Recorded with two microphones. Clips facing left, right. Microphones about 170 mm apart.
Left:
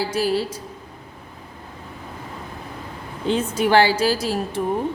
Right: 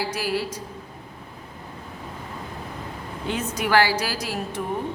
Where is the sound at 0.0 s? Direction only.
30° left (ahead or behind).